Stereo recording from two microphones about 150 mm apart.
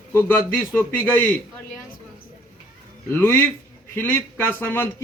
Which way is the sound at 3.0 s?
15° left (ahead or behind).